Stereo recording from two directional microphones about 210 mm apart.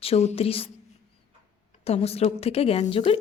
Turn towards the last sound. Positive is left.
turn(degrees=30)  # may be behind; listen again after turning